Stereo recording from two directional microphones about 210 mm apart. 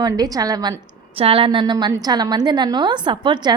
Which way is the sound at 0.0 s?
15° right (ahead or behind).